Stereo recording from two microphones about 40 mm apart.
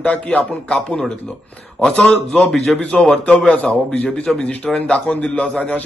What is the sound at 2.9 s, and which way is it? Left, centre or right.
A man's voice, left.